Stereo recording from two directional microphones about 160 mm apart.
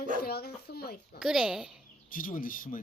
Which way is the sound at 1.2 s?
5° right (ahead or behind).